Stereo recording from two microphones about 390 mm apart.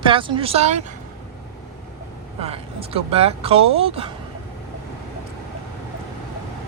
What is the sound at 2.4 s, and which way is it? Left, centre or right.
Speech, centre.